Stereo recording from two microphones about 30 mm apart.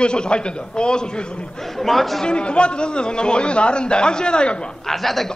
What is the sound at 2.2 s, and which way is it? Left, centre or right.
A man's voice, left.